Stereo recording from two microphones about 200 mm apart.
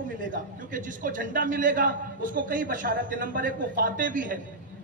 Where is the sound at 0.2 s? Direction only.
40° right (ahead or behind).